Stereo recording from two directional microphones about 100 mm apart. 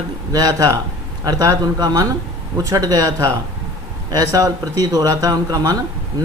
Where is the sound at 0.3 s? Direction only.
35° right (ahead or behind).